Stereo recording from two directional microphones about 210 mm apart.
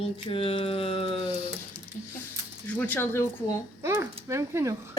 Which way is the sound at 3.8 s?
10° right (ahead or behind).